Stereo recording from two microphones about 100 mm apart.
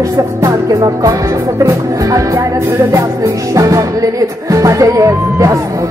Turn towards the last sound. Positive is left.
turn(degrees=-30)  # may be behind; listen again after turning